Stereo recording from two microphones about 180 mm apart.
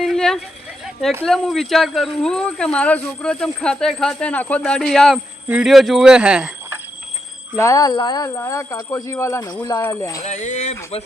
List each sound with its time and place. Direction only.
0.0 s a sound: centre (ahead or behind)
1.2 s speech: centre (ahead or behind)
7.5 s speech: 15° left (ahead or behind)
10.2 s speech: 45° left (ahead or behind)